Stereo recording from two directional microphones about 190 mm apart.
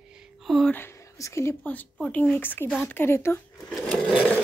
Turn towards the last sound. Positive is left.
turn(degrees=5)  # may be behind; listen again after turning